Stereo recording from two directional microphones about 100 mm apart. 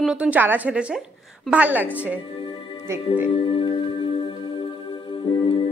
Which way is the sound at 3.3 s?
65° left (ahead or behind).